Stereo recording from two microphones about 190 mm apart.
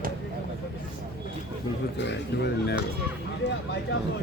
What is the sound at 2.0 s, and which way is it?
Speech, 65° left (ahead or behind).